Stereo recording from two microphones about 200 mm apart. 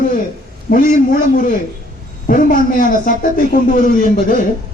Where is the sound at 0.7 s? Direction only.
45° left (ahead or behind).